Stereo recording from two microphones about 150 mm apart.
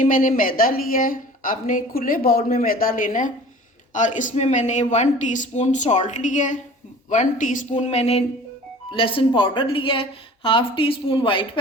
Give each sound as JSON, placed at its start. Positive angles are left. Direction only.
{"t": 0.0, "sound": "a woman's voice", "side_deg": 60}